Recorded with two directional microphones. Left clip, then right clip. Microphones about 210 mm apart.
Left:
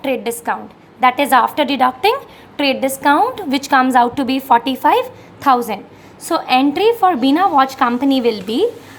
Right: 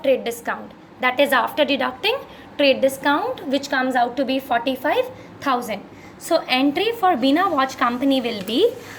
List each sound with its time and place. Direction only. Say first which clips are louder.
0.0 s a woman's voice: even; 25° left (ahead or behind)